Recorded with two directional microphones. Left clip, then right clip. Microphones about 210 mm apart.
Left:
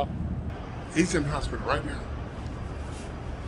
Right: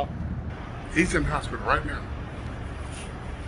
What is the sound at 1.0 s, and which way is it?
Speech, 5° left (ahead or behind).